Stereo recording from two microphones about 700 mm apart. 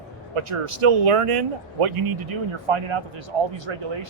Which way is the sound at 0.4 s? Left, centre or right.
Right.